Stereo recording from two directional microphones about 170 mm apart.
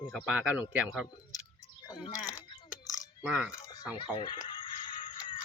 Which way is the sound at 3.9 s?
30° left (ahead or behind).